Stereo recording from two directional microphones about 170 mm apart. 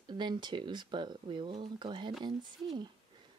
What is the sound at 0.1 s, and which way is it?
Speech, 25° right (ahead or behind).